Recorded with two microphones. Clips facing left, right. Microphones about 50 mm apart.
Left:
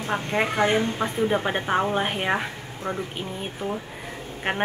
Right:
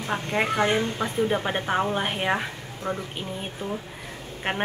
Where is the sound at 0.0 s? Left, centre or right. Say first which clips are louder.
Left 1 dB; left.